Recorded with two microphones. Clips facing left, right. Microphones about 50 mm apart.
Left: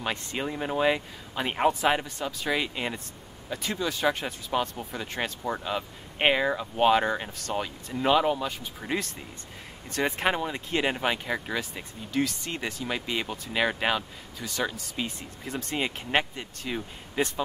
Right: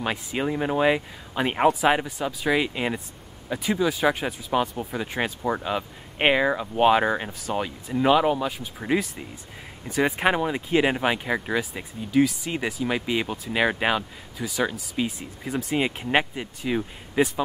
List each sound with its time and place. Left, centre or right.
0.0 s speech: centre